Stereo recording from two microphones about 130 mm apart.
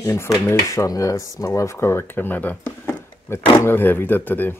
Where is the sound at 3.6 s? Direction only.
15° left (ahead or behind).